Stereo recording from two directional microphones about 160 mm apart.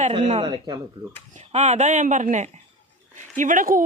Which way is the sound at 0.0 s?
40° right (ahead or behind).